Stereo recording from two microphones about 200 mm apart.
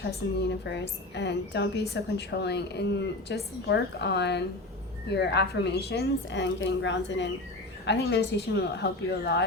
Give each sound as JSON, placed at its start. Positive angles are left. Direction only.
{"t": 0.0, "sound": "a woman's voice", "side_deg": 55}